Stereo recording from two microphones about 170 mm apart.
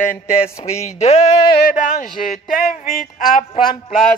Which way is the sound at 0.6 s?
35° left (ahead or behind).